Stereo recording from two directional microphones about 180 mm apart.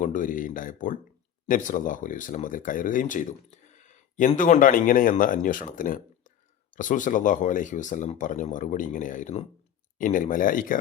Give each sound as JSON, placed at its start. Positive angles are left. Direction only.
{"t": 0.0, "sound": "speech", "side_deg": 45}